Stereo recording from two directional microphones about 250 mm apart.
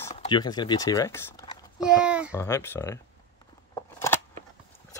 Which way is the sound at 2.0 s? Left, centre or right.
Centre.